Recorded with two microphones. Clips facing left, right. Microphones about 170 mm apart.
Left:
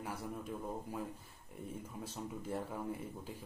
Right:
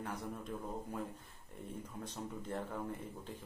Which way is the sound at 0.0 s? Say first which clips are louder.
Even; 5° left (ahead or behind).